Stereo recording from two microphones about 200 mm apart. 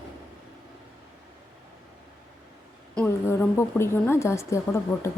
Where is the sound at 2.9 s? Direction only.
10° left (ahead or behind).